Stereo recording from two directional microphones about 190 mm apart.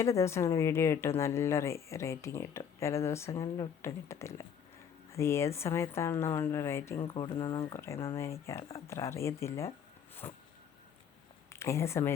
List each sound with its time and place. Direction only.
0.0 s speech: 15° left (ahead or behind)
7.0 s speech: 25° left (ahead or behind)
7.6 s speech: 15° left (ahead or behind)
11.4 s speech: 15° left (ahead or behind)